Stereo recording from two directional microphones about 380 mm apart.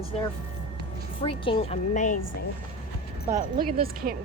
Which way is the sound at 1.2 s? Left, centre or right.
Centre.